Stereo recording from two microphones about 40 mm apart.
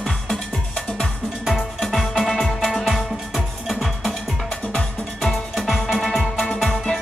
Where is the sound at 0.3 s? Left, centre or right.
Centre.